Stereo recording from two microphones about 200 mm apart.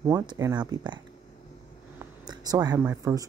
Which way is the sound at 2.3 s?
20° right (ahead or behind).